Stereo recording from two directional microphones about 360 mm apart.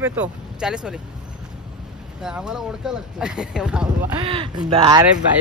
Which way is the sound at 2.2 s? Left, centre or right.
Centre.